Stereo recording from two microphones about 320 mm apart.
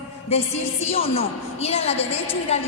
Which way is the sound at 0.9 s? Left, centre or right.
Centre.